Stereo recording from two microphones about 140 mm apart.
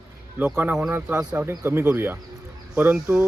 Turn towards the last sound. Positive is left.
turn(degrees=-15)  # may be behind; listen again after turning